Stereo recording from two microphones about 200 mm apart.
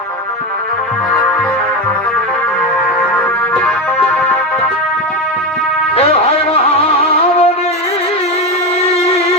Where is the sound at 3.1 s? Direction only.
10° left (ahead or behind).